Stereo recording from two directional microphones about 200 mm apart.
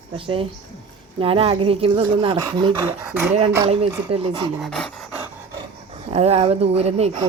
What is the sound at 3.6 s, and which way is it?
Speech, 30° right (ahead or behind).